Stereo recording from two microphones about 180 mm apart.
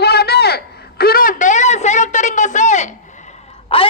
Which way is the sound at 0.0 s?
60° left (ahead or behind).